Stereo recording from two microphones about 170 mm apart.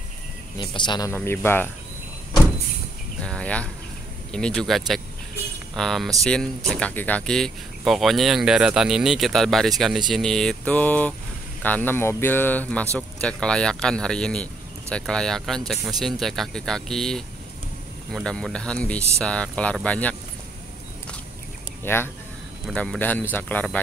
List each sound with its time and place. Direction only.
0.6 s speech: 25° left (ahead or behind)
1.1 s speech: 15° left (ahead or behind)
3.3 s speech: 5° left (ahead or behind)
21.8 s speech: 10° left (ahead or behind)